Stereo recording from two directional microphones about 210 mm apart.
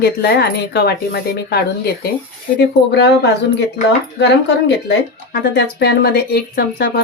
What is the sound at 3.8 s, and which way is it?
Speech, 35° left (ahead or behind).